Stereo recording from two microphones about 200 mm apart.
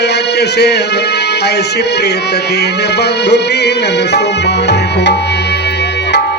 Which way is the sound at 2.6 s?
55° left (ahead or behind).